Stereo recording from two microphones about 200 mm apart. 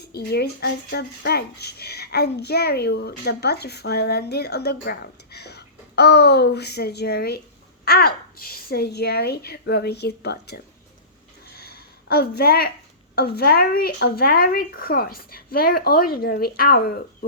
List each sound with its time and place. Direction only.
0.1 s speech: 55° left (ahead or behind)
11.5 s a sound: 50° left (ahead or behind)
13.1 s speech: 50° left (ahead or behind)